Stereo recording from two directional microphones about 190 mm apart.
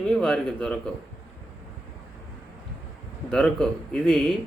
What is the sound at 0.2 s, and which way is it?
Speech, 5° left (ahead or behind).